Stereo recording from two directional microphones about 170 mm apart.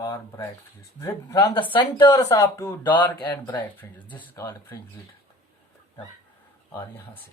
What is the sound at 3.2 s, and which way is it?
Speech, 10° left (ahead or behind).